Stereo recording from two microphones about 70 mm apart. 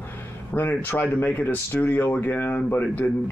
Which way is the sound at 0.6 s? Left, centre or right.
Left.